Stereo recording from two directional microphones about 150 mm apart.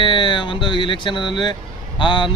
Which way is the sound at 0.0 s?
30° left (ahead or behind).